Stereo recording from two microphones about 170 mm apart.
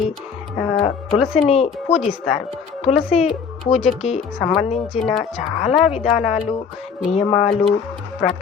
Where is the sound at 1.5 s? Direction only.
40° left (ahead or behind).